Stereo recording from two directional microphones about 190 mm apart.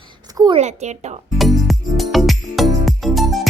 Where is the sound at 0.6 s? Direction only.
35° right (ahead or behind).